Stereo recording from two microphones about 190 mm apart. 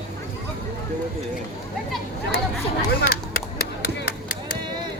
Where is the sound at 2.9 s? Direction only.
55° left (ahead or behind).